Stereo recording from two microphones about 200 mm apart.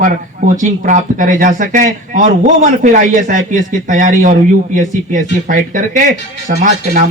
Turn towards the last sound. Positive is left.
turn(degrees=-40)  # may be behind; listen again after turning